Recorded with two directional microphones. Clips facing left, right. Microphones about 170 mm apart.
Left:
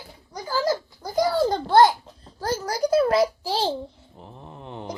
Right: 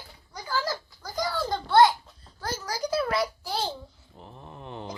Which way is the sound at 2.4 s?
55° left (ahead or behind).